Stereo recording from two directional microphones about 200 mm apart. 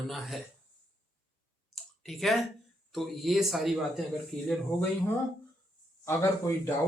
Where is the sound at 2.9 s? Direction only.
Centre (ahead or behind).